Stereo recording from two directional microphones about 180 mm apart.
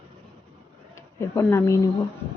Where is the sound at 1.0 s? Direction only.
15° left (ahead or behind).